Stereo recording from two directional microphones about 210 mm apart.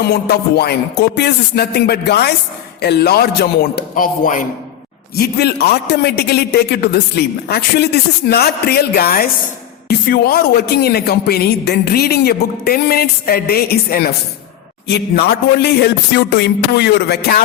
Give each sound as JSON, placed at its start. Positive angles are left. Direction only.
{"t": 0.1, "sound": "a man's voice", "side_deg": 50}